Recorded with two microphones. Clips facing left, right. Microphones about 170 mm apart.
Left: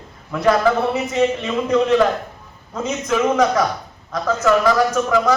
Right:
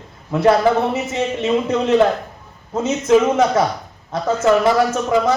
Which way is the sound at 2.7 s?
30° right (ahead or behind).